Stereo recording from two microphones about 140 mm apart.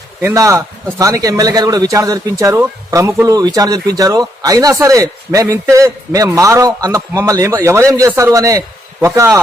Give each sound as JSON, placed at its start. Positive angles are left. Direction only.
{"t": 0.2, "sound": "speech", "side_deg": -20}